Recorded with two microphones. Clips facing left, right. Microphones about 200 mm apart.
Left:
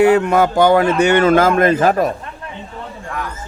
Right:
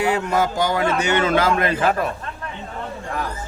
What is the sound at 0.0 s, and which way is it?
Speech, 60° left (ahead or behind).